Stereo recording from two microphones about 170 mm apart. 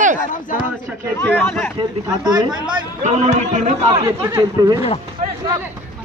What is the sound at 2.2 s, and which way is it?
Speech, 25° right (ahead or behind).